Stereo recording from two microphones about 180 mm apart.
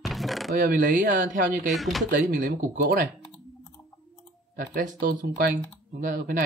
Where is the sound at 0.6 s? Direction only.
50° right (ahead or behind).